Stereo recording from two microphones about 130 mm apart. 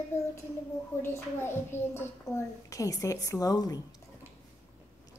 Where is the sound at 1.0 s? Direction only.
15° left (ahead or behind).